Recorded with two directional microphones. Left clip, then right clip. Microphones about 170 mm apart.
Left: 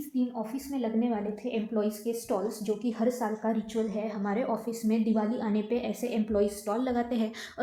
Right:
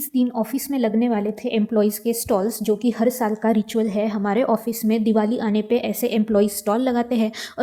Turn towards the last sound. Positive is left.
turn(degrees=-45)  # may be behind; listen again after turning